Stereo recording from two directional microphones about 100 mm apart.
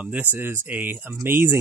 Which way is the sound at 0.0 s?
15° right (ahead or behind).